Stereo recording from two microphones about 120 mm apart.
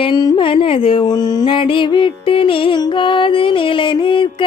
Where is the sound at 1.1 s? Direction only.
35° left (ahead or behind).